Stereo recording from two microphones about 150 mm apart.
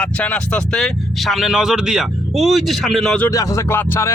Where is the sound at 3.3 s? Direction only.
20° left (ahead or behind).